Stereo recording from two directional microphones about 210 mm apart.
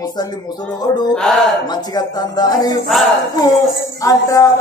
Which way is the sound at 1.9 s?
20° left (ahead or behind).